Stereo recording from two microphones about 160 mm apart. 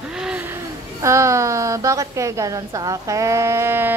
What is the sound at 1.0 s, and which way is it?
A woman's voice, 20° right (ahead or behind).